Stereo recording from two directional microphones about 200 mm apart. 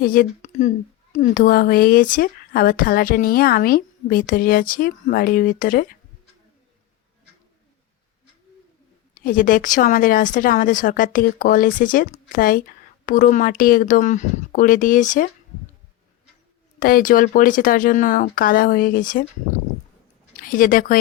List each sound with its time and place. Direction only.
0.0 s speech: 45° left (ahead or behind)
9.1 s speech: 45° left (ahead or behind)
16.8 s speech: 45° left (ahead or behind)
20.3 s speech: 45° left (ahead or behind)